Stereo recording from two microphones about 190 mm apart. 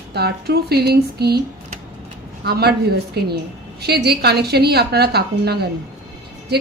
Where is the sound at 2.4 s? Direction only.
55° right (ahead or behind).